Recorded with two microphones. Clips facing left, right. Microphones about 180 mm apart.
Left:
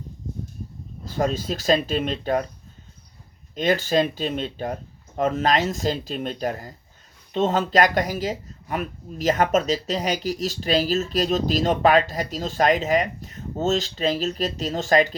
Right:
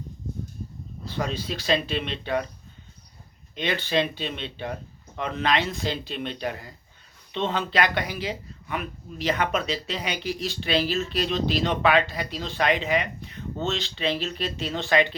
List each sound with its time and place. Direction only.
1.0 s speech: 45° left (ahead or behind)
3.5 s speech: 40° left (ahead or behind)